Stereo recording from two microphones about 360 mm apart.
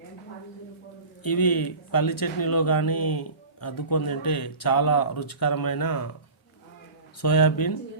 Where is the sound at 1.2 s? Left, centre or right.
Left.